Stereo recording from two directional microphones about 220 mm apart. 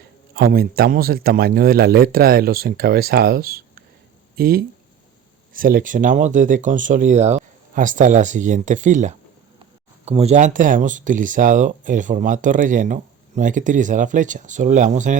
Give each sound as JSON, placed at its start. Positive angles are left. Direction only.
{"t": 0.3, "sound": "speech", "side_deg": -45}